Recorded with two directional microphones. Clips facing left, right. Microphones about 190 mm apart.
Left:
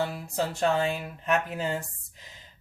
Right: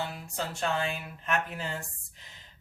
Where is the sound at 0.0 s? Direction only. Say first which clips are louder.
Left 6 dB; 45° left (ahead or behind).